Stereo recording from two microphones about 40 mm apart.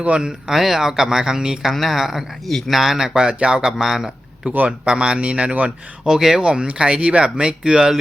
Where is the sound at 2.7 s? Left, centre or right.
Centre.